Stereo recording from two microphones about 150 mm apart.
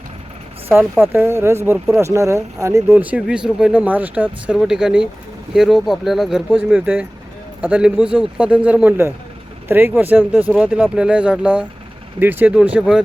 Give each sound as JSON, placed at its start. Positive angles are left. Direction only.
{"t": 0.7, "sound": "speech", "side_deg": -15}